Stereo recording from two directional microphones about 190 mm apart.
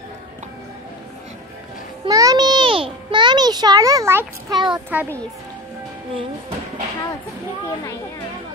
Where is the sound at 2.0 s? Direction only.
20° right (ahead or behind).